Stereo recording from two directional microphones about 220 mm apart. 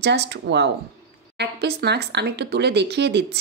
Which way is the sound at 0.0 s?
50° right (ahead or behind).